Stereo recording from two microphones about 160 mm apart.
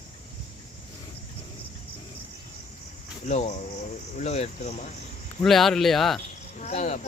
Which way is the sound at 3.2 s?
45° left (ahead or behind).